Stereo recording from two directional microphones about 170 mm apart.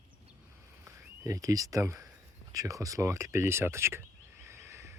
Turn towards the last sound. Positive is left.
turn(degrees=-15)  # may be behind; listen again after turning